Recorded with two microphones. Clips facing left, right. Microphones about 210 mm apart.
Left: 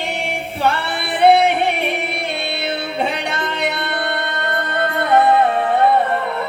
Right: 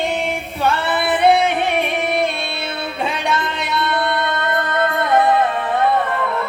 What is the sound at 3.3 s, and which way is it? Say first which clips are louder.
Music: even; 65° left (ahead or behind).